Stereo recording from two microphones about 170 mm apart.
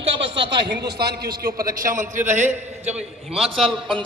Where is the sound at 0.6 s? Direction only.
75° right (ahead or behind).